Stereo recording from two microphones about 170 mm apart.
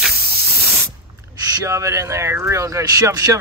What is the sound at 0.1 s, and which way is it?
Spray, 70° right (ahead or behind).